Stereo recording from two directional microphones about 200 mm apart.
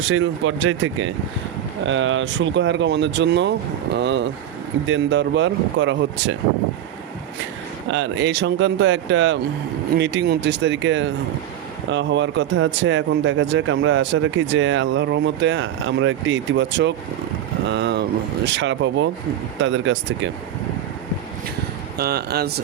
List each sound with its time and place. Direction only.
0.0 s speech: 85° right; by 6.3 s 65° right (ahead or behind)
7.9 s speech: 65° right (ahead or behind)
21.9 s speech: 50° right (ahead or behind)